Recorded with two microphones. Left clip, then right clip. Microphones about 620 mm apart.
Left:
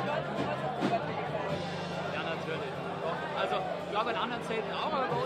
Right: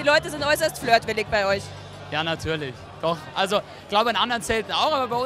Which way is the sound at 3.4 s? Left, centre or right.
Right.